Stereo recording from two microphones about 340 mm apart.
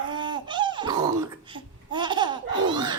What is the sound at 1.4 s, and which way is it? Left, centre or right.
Babbling, centre.